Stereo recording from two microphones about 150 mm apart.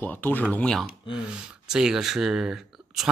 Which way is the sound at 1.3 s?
5° right (ahead or behind).